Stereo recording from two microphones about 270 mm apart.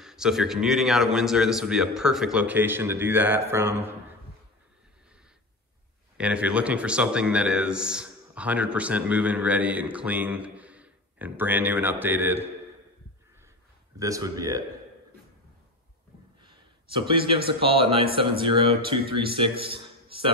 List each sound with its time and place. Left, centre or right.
0.0 s a man's voice: centre
6.1 s a man's voice: centre
13.9 s speech: centre
16.4 s a sound: centre
17.5 s a man's voice: centre